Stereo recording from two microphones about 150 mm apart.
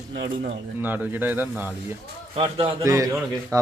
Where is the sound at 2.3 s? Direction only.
35° right (ahead or behind).